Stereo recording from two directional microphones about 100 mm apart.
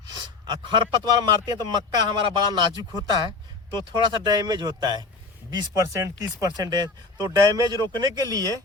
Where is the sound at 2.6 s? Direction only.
45° right (ahead or behind).